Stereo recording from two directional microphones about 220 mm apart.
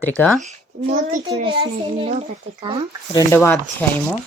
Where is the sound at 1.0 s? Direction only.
35° right (ahead or behind).